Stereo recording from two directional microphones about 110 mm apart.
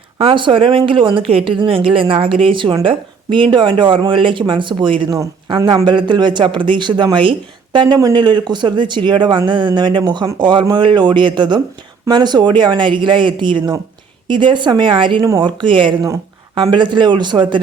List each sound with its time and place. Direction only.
0.2 s speech: 50° right (ahead or behind)